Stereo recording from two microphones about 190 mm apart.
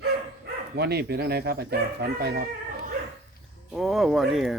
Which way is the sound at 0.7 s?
60° right (ahead or behind).